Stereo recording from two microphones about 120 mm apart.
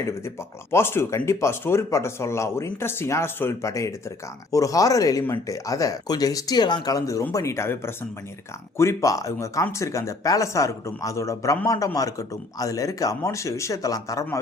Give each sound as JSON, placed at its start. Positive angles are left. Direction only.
{"t": 0.7, "sound": "speech", "side_deg": 20}